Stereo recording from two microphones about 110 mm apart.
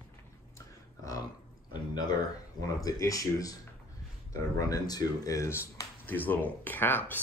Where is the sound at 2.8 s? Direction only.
30° left (ahead or behind).